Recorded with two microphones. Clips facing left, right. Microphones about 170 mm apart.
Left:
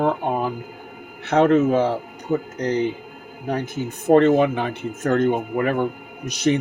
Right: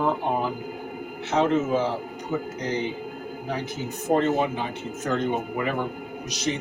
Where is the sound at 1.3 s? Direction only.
60° left (ahead or behind).